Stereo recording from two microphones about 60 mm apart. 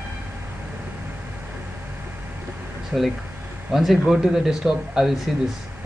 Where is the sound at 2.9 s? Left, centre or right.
Centre.